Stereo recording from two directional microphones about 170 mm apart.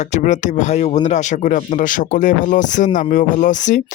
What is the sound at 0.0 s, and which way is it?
Speech, 45° left (ahead or behind).